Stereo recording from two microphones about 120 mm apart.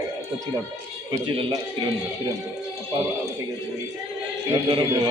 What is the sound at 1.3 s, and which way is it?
Speech, 45° right (ahead or behind).